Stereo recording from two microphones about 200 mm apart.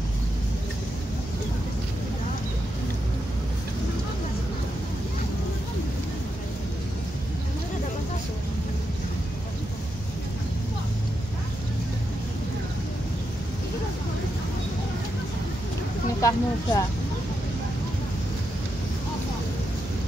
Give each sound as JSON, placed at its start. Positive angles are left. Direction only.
{"t": 16.2, "sound": "speech", "side_deg": 15}